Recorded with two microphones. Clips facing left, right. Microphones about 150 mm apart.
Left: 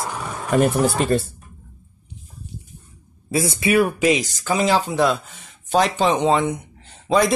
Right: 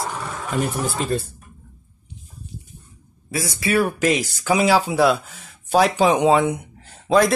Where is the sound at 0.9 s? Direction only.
70° left (ahead or behind).